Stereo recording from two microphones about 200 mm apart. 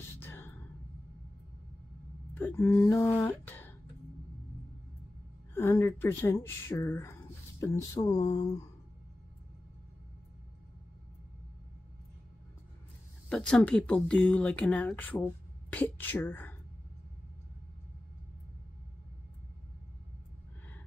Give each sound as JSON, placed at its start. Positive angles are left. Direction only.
{"t": 0.2, "sound": "a sound", "side_deg": 10}
{"t": 2.3, "sound": "speech", "side_deg": 10}
{"t": 5.5, "sound": "speech", "side_deg": 15}
{"t": 13.3, "sound": "speech", "side_deg": 5}